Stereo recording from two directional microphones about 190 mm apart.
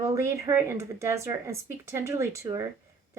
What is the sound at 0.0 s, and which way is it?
Speech, 15° right (ahead or behind).